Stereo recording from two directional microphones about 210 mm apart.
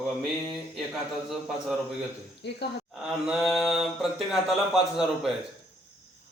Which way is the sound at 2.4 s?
55° left (ahead or behind).